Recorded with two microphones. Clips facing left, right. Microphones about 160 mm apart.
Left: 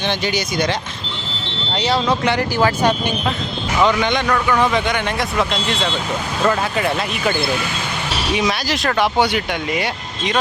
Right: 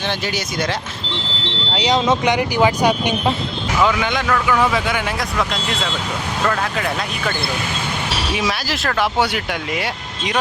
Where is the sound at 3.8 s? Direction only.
5° right (ahead or behind).